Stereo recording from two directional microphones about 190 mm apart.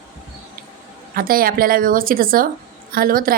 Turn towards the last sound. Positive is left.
turn(degrees=-50)  # may be behind; listen again after turning